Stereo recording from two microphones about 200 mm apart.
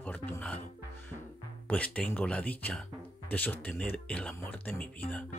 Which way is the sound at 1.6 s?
5° left (ahead or behind).